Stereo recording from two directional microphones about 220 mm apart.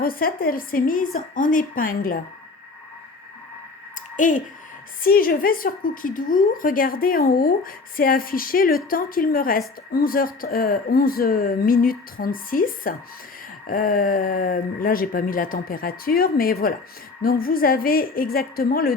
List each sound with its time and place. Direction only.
0.0 s a woman's voice: 40° left (ahead or behind)
4.2 s a woman's voice: 35° left (ahead or behind)